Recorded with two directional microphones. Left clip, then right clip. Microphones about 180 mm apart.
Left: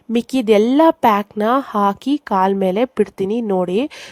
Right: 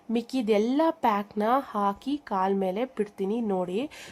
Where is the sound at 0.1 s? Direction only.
40° left (ahead or behind).